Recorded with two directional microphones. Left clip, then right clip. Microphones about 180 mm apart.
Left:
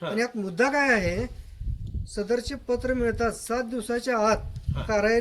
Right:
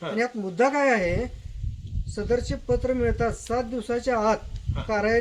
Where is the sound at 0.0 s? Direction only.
25° left (ahead or behind).